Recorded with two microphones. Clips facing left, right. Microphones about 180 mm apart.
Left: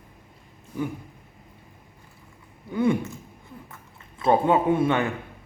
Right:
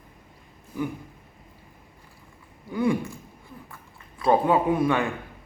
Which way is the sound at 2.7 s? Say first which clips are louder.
Left 1 dB; 20° left (ahead or behind).